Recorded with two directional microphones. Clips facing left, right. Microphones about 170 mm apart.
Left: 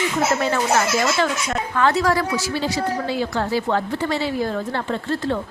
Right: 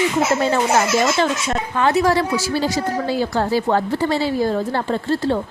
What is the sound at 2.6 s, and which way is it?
A woman's voice, 40° right (ahead or behind).